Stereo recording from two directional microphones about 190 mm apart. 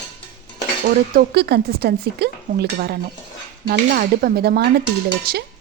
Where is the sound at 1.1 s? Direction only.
55° right (ahead or behind).